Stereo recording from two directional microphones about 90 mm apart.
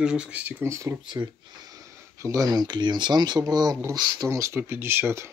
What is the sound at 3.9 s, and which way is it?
Speech, 50° right (ahead or behind).